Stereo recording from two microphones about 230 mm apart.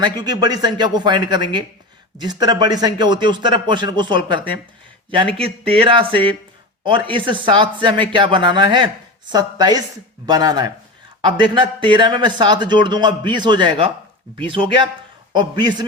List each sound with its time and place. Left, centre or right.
0.2 s a man's voice: centre